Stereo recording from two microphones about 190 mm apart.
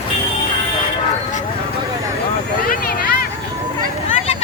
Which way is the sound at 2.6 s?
50° left (ahead or behind).